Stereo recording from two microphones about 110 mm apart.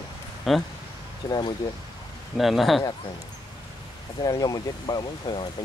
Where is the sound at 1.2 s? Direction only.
40° left (ahead or behind).